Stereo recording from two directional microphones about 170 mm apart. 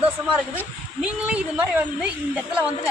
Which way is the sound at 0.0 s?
10° right (ahead or behind).